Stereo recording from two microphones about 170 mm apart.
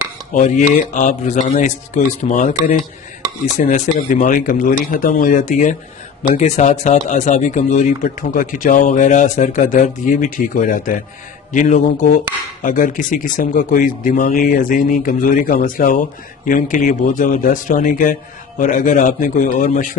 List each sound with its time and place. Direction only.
0.3 s speech: 45° left (ahead or behind)